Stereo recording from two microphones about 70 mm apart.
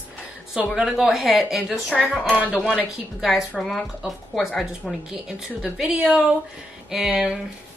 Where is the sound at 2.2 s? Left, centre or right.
Right.